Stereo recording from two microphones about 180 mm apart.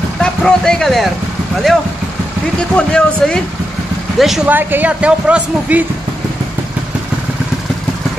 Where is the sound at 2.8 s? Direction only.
5° left (ahead or behind).